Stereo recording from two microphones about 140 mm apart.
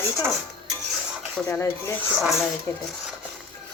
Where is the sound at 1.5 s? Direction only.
20° left (ahead or behind).